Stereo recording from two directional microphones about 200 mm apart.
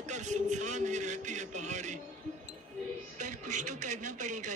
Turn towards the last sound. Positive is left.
turn(degrees=-35)  # may be behind; listen again after turning